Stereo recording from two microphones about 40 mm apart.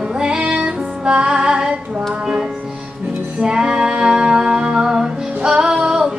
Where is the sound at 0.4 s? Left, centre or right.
Right.